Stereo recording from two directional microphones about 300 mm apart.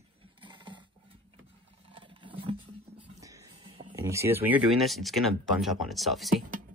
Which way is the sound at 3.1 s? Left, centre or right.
Centre.